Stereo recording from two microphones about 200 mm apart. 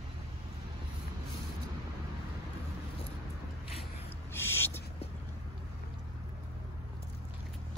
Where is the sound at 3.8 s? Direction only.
30° left (ahead or behind).